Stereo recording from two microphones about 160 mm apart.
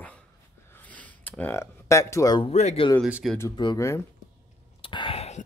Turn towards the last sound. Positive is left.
turn(degrees=40)  # may be behind; listen again after turning